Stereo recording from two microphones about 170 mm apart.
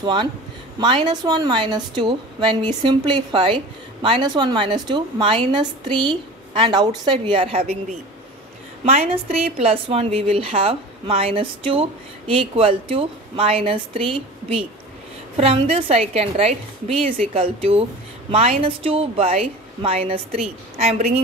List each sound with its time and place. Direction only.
0.0 s a woman's voice: 25° right (ahead or behind)
8.8 s a woman's voice: 35° right (ahead or behind)